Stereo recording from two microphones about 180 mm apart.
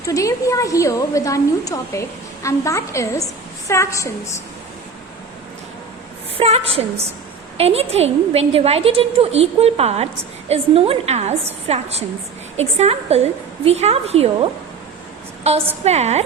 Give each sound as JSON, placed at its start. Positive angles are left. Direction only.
{"t": 0.0, "sound": "a woman's voice", "side_deg": 20}
{"t": 6.3, "sound": "a woman's voice", "side_deg": -35}
{"t": 15.8, "sound": "a woman's voice", "side_deg": -35}